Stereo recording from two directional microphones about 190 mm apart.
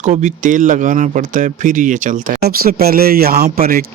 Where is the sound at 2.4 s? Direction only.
55° right (ahead or behind).